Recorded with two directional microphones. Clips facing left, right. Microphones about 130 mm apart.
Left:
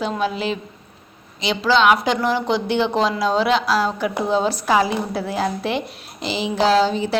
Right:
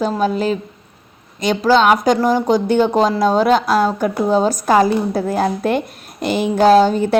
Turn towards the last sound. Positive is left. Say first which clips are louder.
# right 6 dB
turn(degrees=-50)  # may be behind; listen again after turning